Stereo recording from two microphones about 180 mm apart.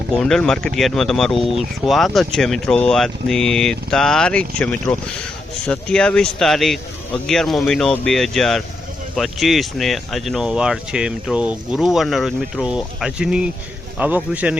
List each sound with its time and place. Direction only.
0.2 s a man's voice: 5° left (ahead or behind)